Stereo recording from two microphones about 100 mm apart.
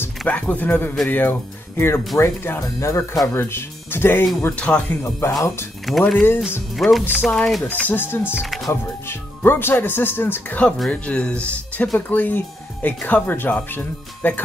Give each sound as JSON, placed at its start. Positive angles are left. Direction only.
{"t": 0.3, "sound": "speech", "side_deg": 15}
{"t": 5.9, "sound": "speech", "side_deg": 0}
{"t": 6.1, "sound": "speech", "side_deg": 20}
{"t": 6.7, "sound": "speech", "side_deg": 0}
{"t": 7.6, "sound": "speech", "side_deg": 15}
{"t": 8.4, "sound": "speech", "side_deg": 0}
{"t": 9.0, "sound": "speech", "side_deg": 25}